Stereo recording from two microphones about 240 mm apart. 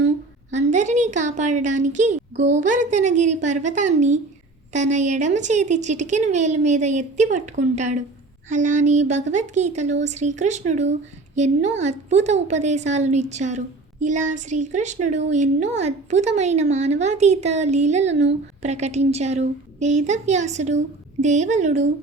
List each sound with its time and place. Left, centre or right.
0.5 s a woman's voice: right